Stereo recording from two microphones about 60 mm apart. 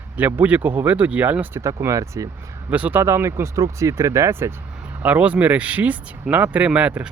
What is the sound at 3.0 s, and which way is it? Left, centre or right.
Speech, right.